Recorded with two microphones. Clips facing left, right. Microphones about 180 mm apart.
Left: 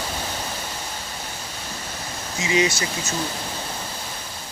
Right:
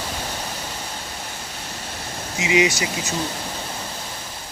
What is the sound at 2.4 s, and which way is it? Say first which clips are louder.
Speech: right 2 dB; 15° right (ahead or behind).